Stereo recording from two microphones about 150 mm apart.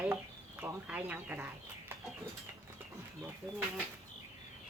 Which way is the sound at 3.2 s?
15° right (ahead or behind).